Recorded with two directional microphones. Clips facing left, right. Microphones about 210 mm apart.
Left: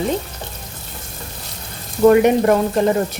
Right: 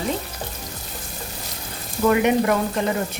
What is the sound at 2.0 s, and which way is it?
Frying, 40° left (ahead or behind).